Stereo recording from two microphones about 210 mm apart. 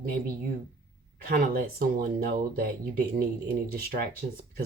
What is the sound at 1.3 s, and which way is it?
Speech, 45° right (ahead or behind).